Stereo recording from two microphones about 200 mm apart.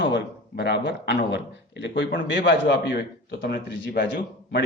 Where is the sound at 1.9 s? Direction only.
45° left (ahead or behind).